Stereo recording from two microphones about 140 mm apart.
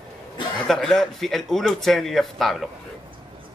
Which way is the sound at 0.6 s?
5° left (ahead or behind).